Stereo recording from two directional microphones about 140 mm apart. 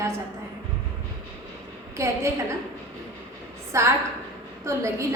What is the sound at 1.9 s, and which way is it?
Speech, 20° right (ahead or behind).